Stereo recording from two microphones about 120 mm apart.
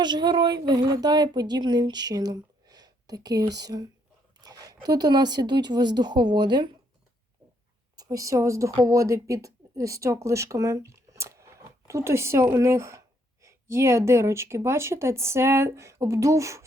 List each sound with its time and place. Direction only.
0.0 s a woman's voice: 40° right (ahead or behind)
7.9 s speech: 30° right (ahead or behind)